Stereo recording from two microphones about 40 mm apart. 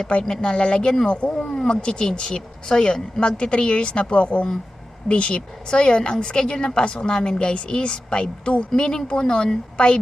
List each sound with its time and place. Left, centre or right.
0.1 s a woman's voice: left